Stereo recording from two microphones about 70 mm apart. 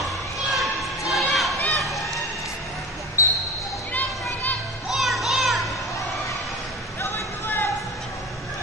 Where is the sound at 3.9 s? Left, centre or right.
Left.